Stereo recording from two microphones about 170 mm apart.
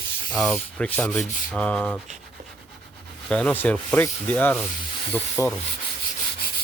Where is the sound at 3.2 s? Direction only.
5° left (ahead or behind).